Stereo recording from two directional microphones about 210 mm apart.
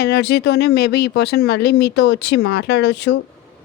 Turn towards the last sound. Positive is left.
turn(degrees=55)  # may be behind; listen again after turning